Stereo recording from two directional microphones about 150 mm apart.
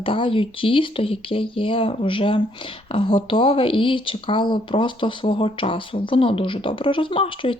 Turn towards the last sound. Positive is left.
turn(degrees=35)  # may be behind; listen again after turning